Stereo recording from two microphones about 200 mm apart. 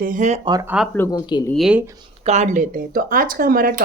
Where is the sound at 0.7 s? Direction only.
Centre (ahead or behind).